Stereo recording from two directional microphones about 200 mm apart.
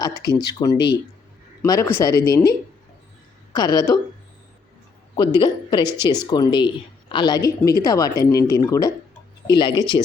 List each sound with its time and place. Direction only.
0.0 s a woman's voice: 20° left (ahead or behind)
5.4 s a woman's voice: 20° left (ahead or behind)